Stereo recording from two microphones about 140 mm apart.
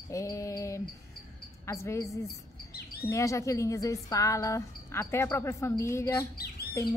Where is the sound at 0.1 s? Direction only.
20° left (ahead or behind).